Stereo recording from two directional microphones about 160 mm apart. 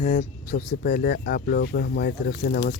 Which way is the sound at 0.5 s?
65° left (ahead or behind).